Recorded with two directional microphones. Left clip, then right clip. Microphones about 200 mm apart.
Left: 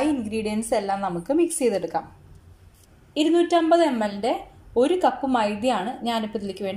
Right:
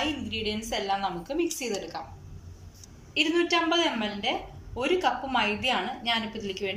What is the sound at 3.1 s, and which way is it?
A woman's voice, 30° left (ahead or behind).